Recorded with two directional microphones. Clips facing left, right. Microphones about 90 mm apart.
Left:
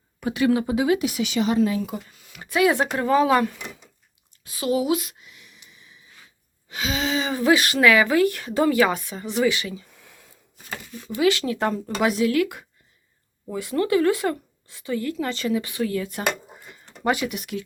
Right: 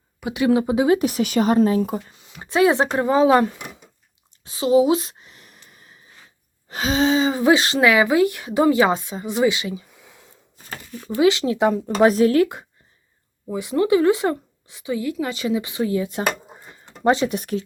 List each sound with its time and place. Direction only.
0.2 s speech: 15° right (ahead or behind)
0.9 s speech: 40° right (ahead or behind)
2.1 s speech: 25° right (ahead or behind)
4.4 s a sound: 25° right (ahead or behind); by 6.1 s 45° right (ahead or behind)
6.7 s speech: 40° right (ahead or behind); by 11.6 s 20° right (ahead or behind)
11.9 s speech: 40° right (ahead or behind)
13.5 s a woman's voice: 20° right (ahead or behind); by 17.6 s 35° right (ahead or behind)